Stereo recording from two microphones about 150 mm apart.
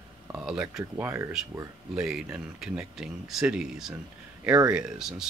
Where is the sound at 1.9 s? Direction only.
5° right (ahead or behind).